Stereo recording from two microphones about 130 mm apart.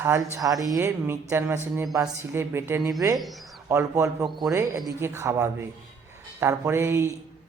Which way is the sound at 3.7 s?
20° right (ahead or behind).